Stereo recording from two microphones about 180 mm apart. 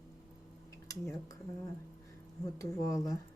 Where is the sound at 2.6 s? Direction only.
20° left (ahead or behind).